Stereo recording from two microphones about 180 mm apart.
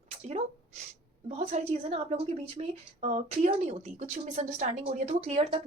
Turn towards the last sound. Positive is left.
turn(degrees=-35)  # may be behind; listen again after turning